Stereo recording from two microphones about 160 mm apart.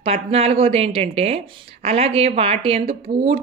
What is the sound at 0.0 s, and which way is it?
Speech, 40° right (ahead or behind).